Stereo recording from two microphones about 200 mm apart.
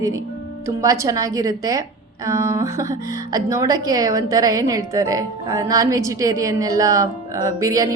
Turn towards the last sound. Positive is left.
turn(degrees=-15)  # may be behind; listen again after turning